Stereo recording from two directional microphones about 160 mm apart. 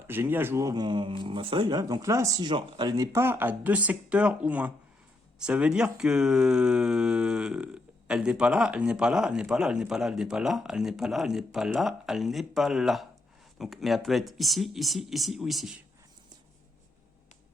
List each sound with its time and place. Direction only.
0.1 s speech: 15° right (ahead or behind)